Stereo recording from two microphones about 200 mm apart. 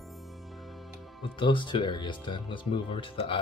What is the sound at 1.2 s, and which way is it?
Speech, 25° left (ahead or behind).